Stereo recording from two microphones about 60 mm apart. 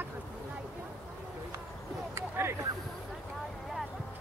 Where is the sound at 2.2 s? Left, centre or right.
Right.